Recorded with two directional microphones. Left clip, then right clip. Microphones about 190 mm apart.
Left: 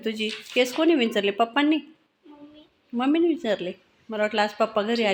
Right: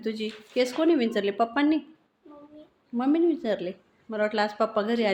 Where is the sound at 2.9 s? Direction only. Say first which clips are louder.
Left 2 dB; 15° left (ahead or behind).